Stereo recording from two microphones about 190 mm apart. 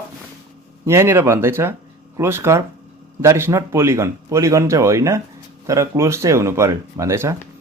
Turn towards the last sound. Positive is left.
turn(degrees=-15)  # may be behind; listen again after turning